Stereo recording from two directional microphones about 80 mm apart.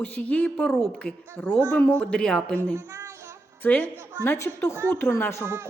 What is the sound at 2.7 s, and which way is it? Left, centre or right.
Child singing, right.